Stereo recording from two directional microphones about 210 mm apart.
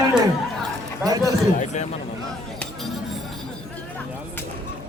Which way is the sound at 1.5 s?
35° left (ahead or behind).